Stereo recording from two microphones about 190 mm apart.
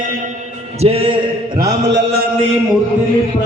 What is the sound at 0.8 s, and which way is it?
Speech, 30° right (ahead or behind).